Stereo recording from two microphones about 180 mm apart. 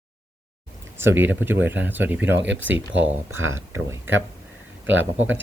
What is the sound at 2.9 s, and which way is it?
Speech, 90° right.